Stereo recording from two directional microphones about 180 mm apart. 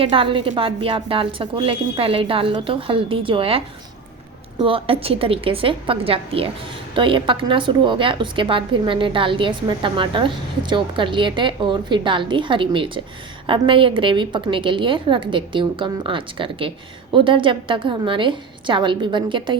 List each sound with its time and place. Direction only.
0.0 s a woman's voice: 30° right (ahead or behind)